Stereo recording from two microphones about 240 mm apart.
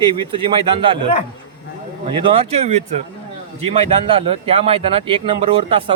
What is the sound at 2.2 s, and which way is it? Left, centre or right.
Speech, right.